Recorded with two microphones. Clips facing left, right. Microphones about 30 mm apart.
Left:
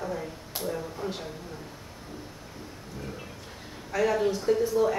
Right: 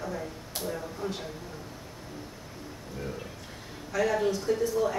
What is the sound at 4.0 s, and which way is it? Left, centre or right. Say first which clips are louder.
A woman's voice: left 1 dB; centre.